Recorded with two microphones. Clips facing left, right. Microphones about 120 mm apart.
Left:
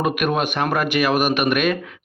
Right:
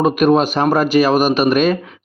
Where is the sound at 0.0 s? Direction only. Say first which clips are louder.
Right 8 dB; 35° right (ahead or behind).